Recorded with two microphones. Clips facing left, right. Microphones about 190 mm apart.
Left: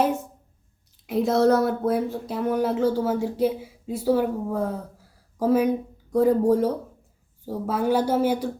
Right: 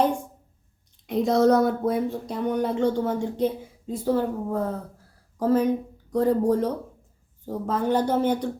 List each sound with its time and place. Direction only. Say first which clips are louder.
1.0 s speech: even; 5° left (ahead or behind)